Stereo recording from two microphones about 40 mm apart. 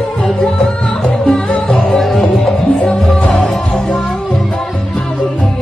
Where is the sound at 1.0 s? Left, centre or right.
Centre.